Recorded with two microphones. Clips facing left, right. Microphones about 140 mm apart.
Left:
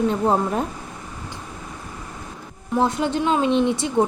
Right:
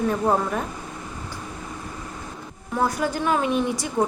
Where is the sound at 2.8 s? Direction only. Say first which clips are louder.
Left 2 dB; 25° left (ahead or behind).